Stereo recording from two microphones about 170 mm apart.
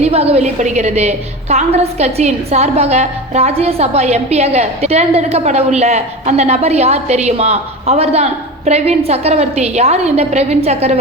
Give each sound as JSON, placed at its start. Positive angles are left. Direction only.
{"t": 0.0, "sound": "a woman's voice", "side_deg": -35}